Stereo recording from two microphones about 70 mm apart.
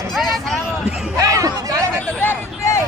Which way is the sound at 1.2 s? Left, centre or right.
Right.